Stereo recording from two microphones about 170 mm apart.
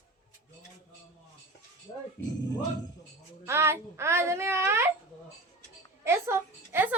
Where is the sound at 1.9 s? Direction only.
20° left (ahead or behind).